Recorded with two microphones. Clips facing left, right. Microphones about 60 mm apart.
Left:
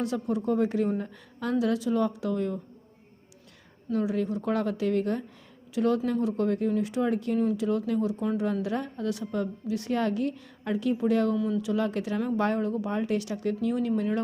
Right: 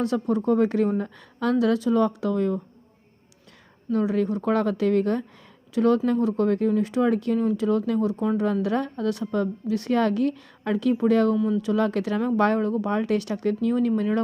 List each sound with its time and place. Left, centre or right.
0.0 s speech: right
3.9 s a woman's voice: right